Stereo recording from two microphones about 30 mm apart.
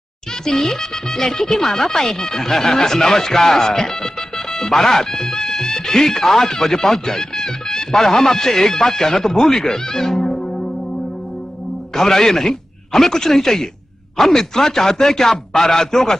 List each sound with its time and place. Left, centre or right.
0.5 s speech: centre
5.3 s speech: left
11.9 s speech: centre